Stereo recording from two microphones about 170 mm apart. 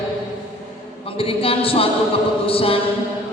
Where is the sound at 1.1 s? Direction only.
35° left (ahead or behind).